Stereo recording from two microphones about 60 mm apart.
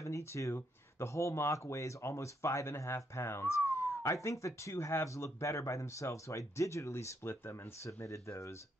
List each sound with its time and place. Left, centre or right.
0.0 s speech: left
4.0 s speech: left
8.1 s speech: left